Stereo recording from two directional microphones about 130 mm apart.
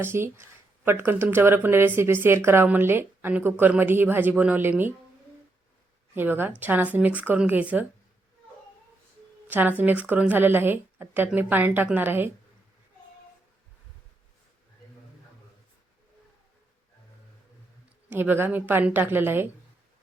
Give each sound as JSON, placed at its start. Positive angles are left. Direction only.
{"t": 0.0, "sound": "speech", "side_deg": -20}
{"t": 6.1, "sound": "speech", "side_deg": -15}
{"t": 9.5, "sound": "speech", "side_deg": -15}
{"t": 18.1, "sound": "speech", "side_deg": -15}